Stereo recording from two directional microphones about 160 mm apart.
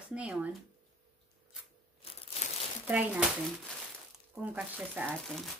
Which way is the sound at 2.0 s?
40° left (ahead or behind).